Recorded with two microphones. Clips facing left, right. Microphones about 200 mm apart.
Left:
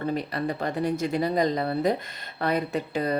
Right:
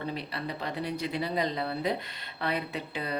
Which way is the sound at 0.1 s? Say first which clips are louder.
Left 7 dB; 45° left (ahead or behind).